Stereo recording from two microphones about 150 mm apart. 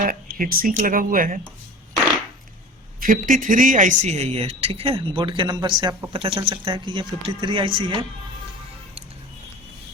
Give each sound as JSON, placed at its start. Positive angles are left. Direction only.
{"t": 0.0, "sound": "speech", "side_deg": -65}
{"t": 3.0, "sound": "speech", "side_deg": -60}